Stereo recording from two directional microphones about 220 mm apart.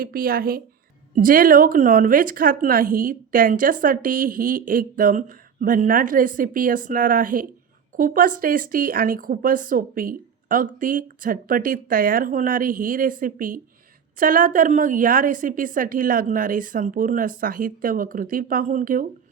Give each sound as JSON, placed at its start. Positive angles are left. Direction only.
{"t": 0.0, "sound": "a woman's voice", "side_deg": -40}